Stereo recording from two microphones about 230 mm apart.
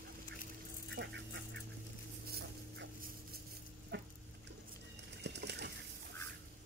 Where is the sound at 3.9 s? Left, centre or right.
Right.